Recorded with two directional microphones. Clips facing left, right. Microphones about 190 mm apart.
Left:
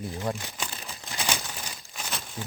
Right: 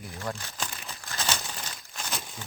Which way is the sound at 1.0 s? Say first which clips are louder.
Left 1 dB; 15° left (ahead or behind).